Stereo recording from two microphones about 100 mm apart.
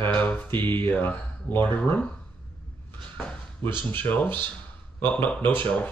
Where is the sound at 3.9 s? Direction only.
20° left (ahead or behind).